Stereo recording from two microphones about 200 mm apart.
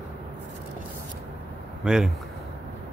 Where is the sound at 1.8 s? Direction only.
Centre (ahead or behind).